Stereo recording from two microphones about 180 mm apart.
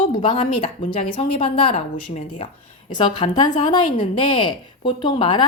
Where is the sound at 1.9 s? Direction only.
40° left (ahead or behind).